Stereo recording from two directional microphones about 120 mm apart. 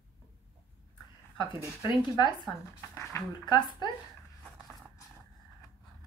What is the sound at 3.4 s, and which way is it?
Speech, 35° left (ahead or behind).